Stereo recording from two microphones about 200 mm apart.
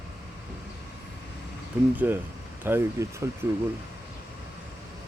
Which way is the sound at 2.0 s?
10° right (ahead or behind).